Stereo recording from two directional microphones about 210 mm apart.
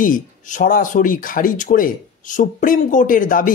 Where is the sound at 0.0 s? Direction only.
40° left (ahead or behind).